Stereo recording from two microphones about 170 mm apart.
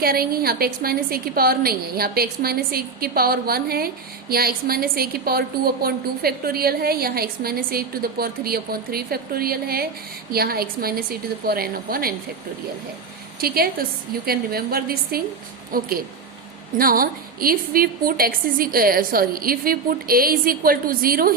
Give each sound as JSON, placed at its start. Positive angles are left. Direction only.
{"t": 0.0, "sound": "a woman's voice", "side_deg": -60}
{"t": 13.4, "sound": "a woman's voice", "side_deg": -60}